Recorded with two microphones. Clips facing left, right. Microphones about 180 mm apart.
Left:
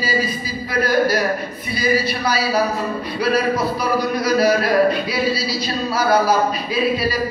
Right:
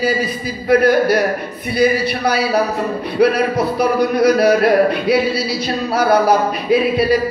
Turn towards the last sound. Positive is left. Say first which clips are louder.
# right 6 dB
turn(degrees=-60)  # may be behind; listen again after turning